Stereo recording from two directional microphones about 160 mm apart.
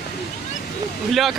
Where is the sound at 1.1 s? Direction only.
Centre (ahead or behind).